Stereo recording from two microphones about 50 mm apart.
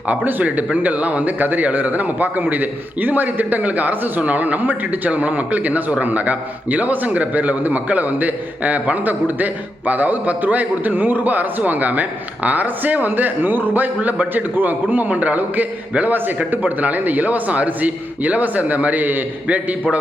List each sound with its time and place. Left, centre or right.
0.1 s speech: right